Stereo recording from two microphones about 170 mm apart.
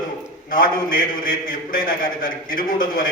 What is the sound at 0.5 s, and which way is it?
A man's voice, 55° left (ahead or behind).